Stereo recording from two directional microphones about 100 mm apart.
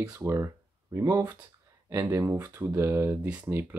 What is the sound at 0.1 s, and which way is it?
Speech, 25° right (ahead or behind).